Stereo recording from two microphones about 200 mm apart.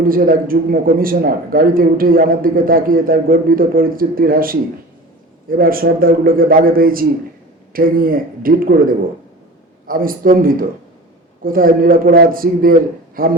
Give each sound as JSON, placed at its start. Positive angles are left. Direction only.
{"t": 0.0, "sound": "a man's voice", "side_deg": -45}
{"t": 9.8, "sound": "a man's voice", "side_deg": -45}